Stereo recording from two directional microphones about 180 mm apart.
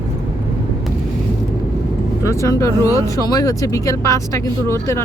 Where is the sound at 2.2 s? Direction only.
15° left (ahead or behind).